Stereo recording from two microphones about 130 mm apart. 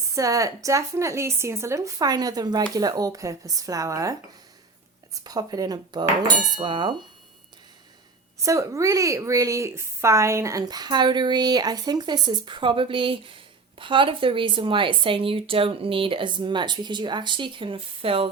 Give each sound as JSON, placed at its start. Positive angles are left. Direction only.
{"t": 0.0, "sound": "a woman's voice", "side_deg": -25}
{"t": 8.4, "sound": "a woman's voice", "side_deg": -25}